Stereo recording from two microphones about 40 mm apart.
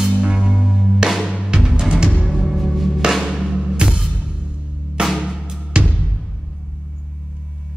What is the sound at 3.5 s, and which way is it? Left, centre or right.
Music, right.